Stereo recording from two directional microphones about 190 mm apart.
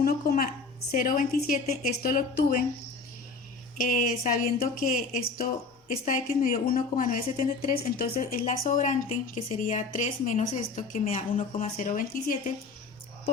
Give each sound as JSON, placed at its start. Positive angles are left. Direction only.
{"t": 0.0, "sound": "a sound", "side_deg": 50}
{"t": 0.9, "sound": "a woman's voice", "side_deg": 45}
{"t": 3.8, "sound": "a woman's voice", "side_deg": 45}